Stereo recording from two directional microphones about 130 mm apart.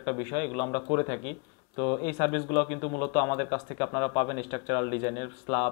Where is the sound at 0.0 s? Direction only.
20° left (ahead or behind).